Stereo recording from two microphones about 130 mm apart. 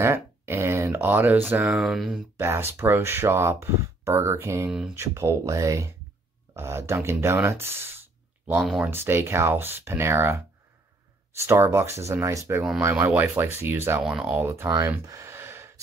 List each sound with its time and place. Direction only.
0.0 s speech: 20° right (ahead or behind)
1.7 s speech: centre (ahead or behind)
2.3 s speech: 20° right (ahead or behind)
8.5 s speech: 5° right (ahead or behind)
8.9 s speech: 20° right (ahead or behind)
11.3 s speech: 20° right (ahead or behind)
14.0 s speech: 5° right (ahead or behind)
14.8 s a sound: 20° right (ahead or behind)